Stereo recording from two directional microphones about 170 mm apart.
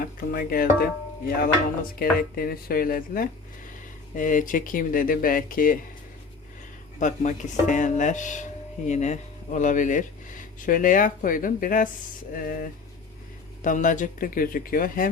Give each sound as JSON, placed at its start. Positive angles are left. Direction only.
{"t": 0.0, "sound": "speech", "side_deg": 60}
{"t": 7.0, "sound": "speech", "side_deg": 45}